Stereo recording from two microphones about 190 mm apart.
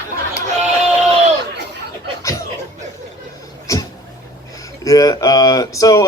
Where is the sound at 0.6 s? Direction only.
35° right (ahead or behind).